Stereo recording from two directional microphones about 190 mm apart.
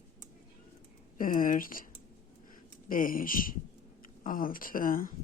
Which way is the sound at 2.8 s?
45° left (ahead or behind).